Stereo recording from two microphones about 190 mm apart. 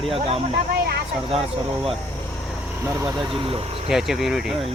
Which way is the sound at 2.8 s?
15° right (ahead or behind).